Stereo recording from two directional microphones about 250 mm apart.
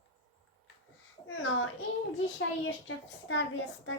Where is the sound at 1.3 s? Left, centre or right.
Left.